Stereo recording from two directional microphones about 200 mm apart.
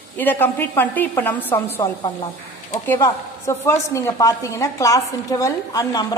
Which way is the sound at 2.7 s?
15° left (ahead or behind).